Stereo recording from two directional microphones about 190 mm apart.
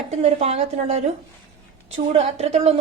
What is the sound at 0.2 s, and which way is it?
A woman's voice, 35° right (ahead or behind).